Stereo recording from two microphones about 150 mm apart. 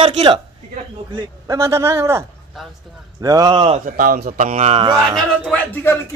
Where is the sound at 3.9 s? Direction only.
65° right (ahead or behind).